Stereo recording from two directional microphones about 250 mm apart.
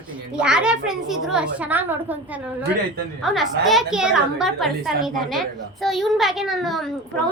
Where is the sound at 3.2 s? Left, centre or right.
Centre.